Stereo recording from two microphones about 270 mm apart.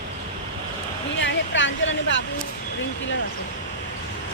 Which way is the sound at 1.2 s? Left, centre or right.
Left.